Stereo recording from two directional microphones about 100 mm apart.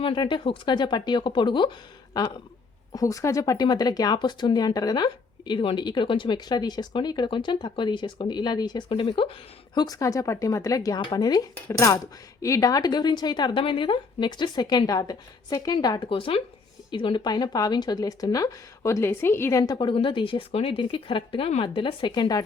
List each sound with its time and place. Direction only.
0.0 s speech: 55° left (ahead or behind)
9.7 s speech: 40° left (ahead or behind)
16.0 s speech: 60° left (ahead or behind); by 19.9 s 40° left (ahead or behind)
19.9 s speech: 60° left (ahead or behind); by 22.4 s 45° left (ahead or behind)